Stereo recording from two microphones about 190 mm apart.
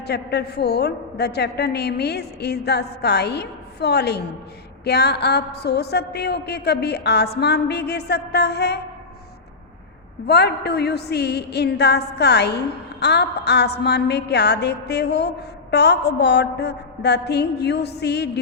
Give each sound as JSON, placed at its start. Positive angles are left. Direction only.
{"t": 0.0, "sound": "a woman's voice", "side_deg": 60}
{"t": 10.2, "sound": "a woman's voice", "side_deg": 60}